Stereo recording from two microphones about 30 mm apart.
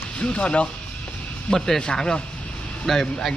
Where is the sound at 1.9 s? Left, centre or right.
Left.